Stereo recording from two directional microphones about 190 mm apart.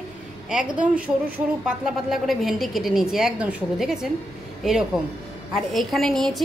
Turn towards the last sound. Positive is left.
turn(degrees=0)  # may be behind; listen again after turning